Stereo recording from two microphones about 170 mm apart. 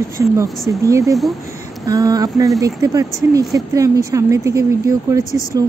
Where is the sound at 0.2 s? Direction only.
20° right (ahead or behind).